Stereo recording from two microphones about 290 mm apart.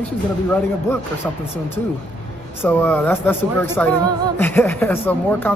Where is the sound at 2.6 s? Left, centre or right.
Centre.